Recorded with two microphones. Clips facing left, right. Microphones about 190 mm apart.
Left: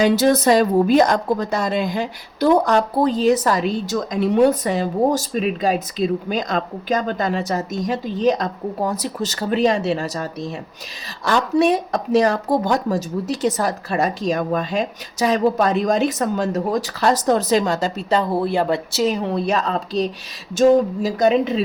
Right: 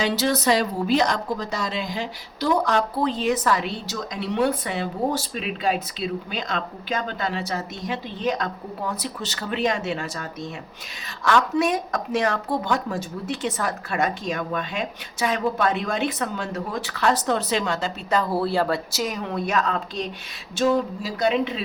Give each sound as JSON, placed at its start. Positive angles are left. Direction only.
{"t": 0.0, "sound": "a woman's voice", "side_deg": 50}
{"t": 18.2, "sound": "speech", "side_deg": 20}
{"t": 20.6, "sound": "a woman's voice", "side_deg": 45}